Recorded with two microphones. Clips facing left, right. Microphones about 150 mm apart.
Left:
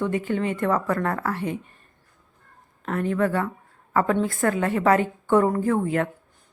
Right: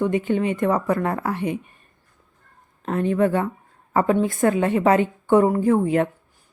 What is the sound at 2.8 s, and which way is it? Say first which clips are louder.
A woman's voice: right 3 dB; 20° right (ahead or behind).